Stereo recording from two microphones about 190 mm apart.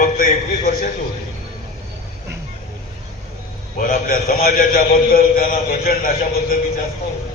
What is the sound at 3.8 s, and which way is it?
A man's voice, 50° left (ahead or behind).